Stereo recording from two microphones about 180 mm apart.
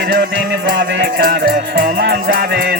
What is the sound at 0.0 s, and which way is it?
Music, 65° right (ahead or behind).